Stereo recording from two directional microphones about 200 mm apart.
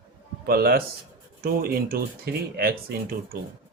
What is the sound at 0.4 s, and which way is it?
Speech, 50° right (ahead or behind).